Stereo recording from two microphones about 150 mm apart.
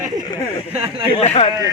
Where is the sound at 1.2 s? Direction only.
40° left (ahead or behind).